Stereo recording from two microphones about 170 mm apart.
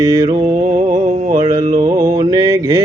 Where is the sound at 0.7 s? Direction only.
45° right (ahead or behind).